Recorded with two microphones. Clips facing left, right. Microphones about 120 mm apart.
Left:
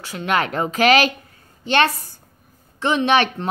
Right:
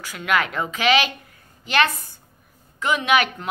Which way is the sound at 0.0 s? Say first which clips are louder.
Left 2 dB; 30° left (ahead or behind).